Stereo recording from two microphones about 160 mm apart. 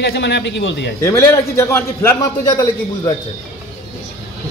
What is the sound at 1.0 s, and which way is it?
A man's voice, 15° left (ahead or behind).